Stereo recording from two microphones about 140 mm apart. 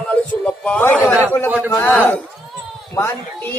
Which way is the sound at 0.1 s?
10° left (ahead or behind).